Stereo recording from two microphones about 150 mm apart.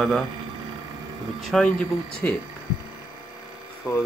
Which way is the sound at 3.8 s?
15° left (ahead or behind).